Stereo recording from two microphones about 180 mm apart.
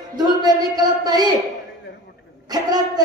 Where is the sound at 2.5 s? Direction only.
20° right (ahead or behind).